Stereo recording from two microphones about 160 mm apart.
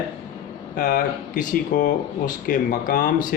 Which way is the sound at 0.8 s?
55° left (ahead or behind).